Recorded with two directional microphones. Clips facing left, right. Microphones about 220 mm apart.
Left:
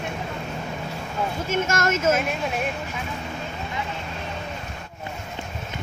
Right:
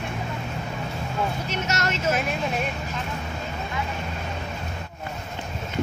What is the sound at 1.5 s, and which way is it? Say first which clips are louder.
Speech: left 4 dB; 50° left (ahead or behind).